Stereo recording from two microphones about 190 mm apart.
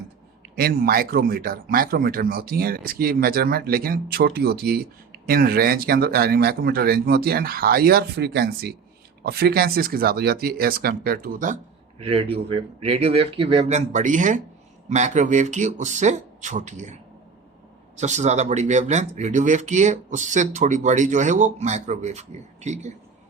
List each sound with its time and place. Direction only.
0.5 s speech: 50° right (ahead or behind)